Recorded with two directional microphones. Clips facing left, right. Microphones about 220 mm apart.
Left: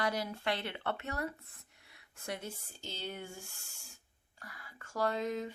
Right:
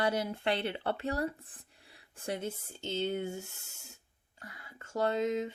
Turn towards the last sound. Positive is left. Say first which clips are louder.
# right 4 dB
turn(degrees=-25)  # may be behind; listen again after turning